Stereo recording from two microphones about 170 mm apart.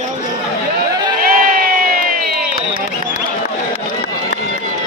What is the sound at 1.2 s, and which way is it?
Crowd, 55° right (ahead or behind).